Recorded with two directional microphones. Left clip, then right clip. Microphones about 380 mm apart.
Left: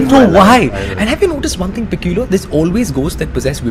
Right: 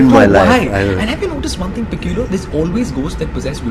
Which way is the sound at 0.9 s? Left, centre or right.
Left.